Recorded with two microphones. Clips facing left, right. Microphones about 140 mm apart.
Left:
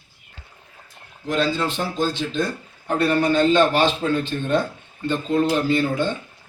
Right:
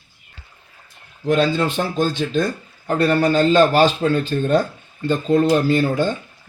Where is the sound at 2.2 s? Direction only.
65° right (ahead or behind).